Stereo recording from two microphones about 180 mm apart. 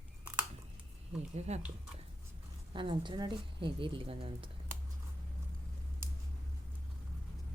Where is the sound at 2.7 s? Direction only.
30° right (ahead or behind).